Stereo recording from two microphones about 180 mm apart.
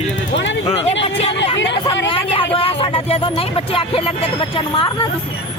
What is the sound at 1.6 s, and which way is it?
Speech, 80° left.